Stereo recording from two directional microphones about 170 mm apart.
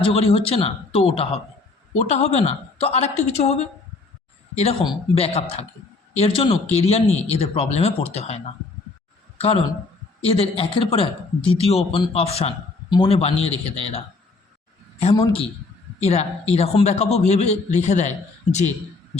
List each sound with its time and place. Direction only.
0.0 s speech: 35° left (ahead or behind)
4.9 s speech: 35° left (ahead or behind)
9.4 s speech: 35° left (ahead or behind)
15.1 s a man's voice: 30° left (ahead or behind)